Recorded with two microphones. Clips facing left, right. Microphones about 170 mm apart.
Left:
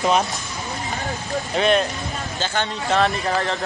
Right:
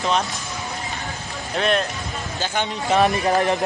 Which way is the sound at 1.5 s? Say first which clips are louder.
Left 2 dB; centre (ahead or behind).